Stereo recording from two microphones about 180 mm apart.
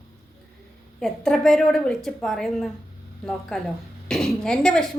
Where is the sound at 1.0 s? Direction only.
5° left (ahead or behind).